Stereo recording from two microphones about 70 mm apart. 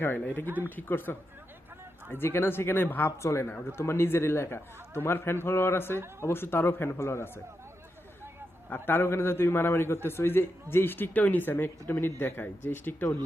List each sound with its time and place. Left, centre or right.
0.0 s a man's voice: left
3.2 s a man's voice: left
8.7 s a man's voice: left